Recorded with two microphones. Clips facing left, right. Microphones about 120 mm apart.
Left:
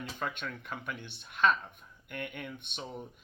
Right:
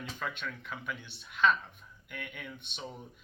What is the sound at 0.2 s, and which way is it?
Speech, 45° left (ahead or behind).